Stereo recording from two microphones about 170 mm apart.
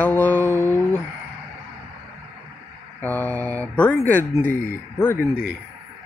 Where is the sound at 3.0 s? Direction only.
10° left (ahead or behind).